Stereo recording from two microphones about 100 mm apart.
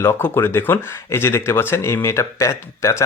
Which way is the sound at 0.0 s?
25° left (ahead or behind).